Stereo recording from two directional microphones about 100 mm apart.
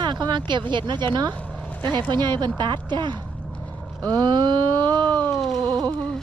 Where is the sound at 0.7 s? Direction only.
50° right (ahead or behind).